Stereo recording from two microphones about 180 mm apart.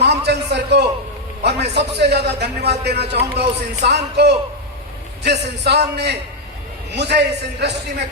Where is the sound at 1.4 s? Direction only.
70° right (ahead or behind).